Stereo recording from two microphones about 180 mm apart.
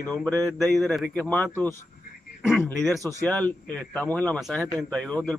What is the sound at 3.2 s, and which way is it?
Speech, 10° left (ahead or behind).